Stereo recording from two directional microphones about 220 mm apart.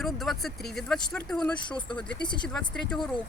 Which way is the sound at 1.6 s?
20° left (ahead or behind).